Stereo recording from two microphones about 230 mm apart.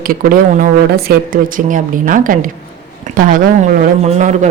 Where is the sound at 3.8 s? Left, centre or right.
Right.